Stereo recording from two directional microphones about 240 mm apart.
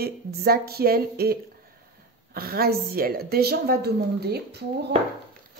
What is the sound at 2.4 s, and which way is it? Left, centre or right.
A woman's voice, right.